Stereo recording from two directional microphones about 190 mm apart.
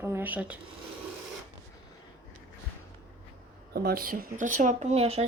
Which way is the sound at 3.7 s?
55° right (ahead or behind).